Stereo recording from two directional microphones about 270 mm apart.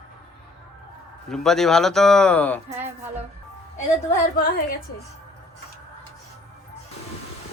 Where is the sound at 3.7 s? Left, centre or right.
Left.